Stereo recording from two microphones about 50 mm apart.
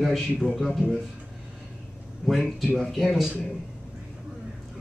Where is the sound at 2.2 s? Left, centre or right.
Centre.